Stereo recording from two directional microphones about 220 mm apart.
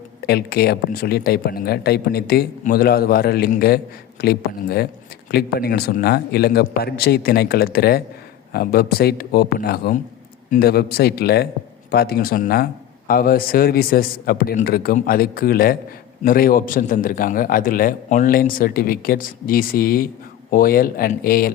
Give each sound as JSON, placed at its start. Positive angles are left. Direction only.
{"t": 0.3, "sound": "a man's voice", "side_deg": 45}